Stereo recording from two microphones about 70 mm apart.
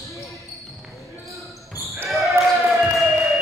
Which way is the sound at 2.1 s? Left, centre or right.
Centre.